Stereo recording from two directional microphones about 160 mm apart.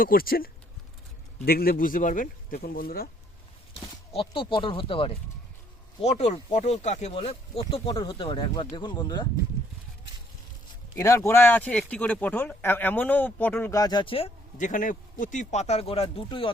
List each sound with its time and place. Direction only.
0.0 s speech: 65° left (ahead or behind)
3.8 s speech: 35° left (ahead or behind)
11.0 s speech: 20° left (ahead or behind)
14.6 s speech: 55° left (ahead or behind); by 16.5 s 35° left (ahead or behind)